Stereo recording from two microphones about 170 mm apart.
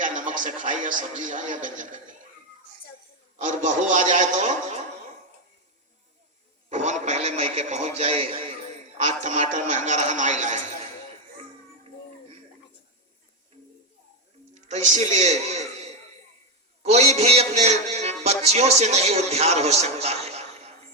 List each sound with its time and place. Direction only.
0.0 s a man's voice: 50° right (ahead or behind)
3.4 s a man's voice: 45° right (ahead or behind)
6.7 s a man's voice: 45° right (ahead or behind)
9.0 s a man's voice: 45° right (ahead or behind)
14.5 s a man's voice: 45° right (ahead or behind)